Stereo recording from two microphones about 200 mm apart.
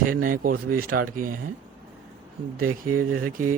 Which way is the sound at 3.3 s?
45° right (ahead or behind).